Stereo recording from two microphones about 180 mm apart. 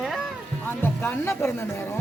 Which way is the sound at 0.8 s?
15° left (ahead or behind).